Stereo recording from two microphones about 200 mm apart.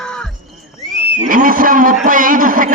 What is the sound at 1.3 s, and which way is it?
A man's voice, 45° right (ahead or behind).